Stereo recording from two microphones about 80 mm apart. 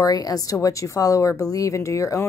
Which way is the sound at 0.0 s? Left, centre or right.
Left.